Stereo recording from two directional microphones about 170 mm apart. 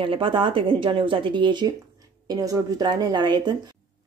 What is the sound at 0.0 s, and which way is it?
Speech, 30° right (ahead or behind).